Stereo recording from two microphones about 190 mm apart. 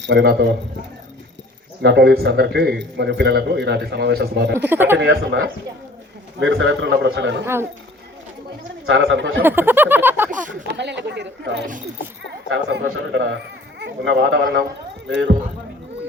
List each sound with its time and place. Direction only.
0.0 s a man's voice: 65° right (ahead or behind)
1.8 s a man's voice: 60° right (ahead or behind)
4.5 s speech: 10° right (ahead or behind)
4.9 s a man's voice: 65° right (ahead or behind)
6.4 s a man's voice: 70° right (ahead or behind)
7.4 s speech: 10° right (ahead or behind)
8.9 s a man's voice: 75° right (ahead or behind)
9.4 s a sound: 10° right (ahead or behind)
10.7 s a man's voice: 65° right (ahead or behind)